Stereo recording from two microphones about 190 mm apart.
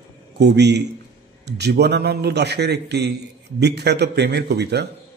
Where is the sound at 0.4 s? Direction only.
60° right (ahead or behind).